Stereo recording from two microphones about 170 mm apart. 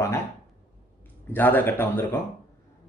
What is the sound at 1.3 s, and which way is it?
Speech, 10° left (ahead or behind).